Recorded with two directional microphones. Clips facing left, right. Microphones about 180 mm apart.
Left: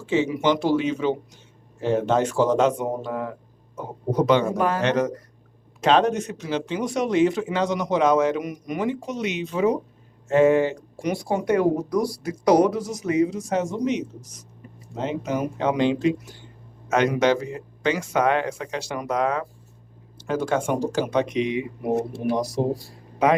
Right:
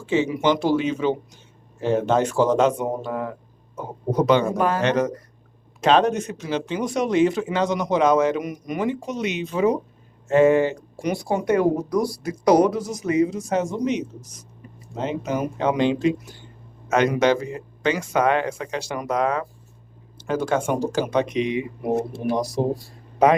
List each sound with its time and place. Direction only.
0.1 s speech: 50° right (ahead or behind)
15.0 s speech: 50° right (ahead or behind)